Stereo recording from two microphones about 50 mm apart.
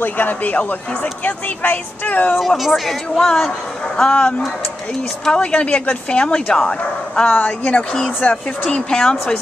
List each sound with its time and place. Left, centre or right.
0.0 s speech: left
2.3 s a man's voice: centre
5.3 s speech: centre
7.2 s speech: left
8.6 s speech: centre